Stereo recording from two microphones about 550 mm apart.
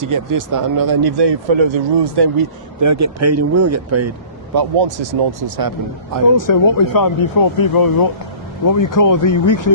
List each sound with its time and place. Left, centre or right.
0.0 s speech: right
2.8 s speech: right
4.5 s speech: right
6.3 s speech: left